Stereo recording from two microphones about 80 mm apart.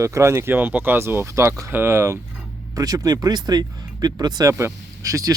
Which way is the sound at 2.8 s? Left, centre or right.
Right.